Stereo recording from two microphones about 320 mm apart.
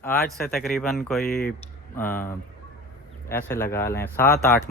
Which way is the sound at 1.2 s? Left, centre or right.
Left.